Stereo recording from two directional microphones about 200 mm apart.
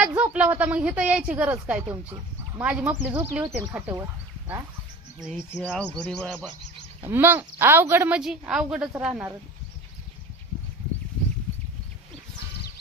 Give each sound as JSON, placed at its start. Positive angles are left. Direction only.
{"t": 0.2, "sound": "a woman's voice", "side_deg": -5}
{"t": 3.4, "sound": "a woman's voice", "side_deg": -20}
{"t": 5.2, "sound": "bird", "side_deg": 5}
{"t": 7.0, "sound": "a woman's voice", "side_deg": -10}